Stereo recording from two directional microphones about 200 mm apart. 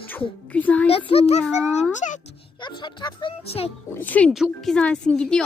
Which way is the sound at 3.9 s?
10° left (ahead or behind).